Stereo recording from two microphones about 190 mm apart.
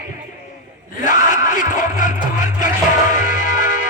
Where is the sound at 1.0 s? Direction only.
40° left (ahead or behind).